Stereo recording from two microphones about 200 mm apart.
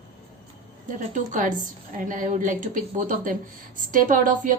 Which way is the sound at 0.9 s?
40° right (ahead or behind).